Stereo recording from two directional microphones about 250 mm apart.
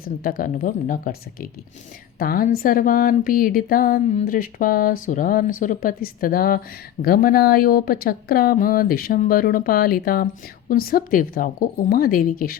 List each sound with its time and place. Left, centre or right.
0.0 s speech: left